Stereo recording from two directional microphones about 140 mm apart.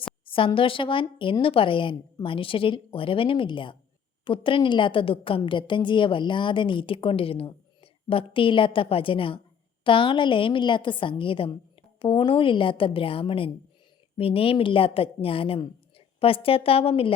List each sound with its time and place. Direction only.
0.3 s a woman's voice: 40° left (ahead or behind)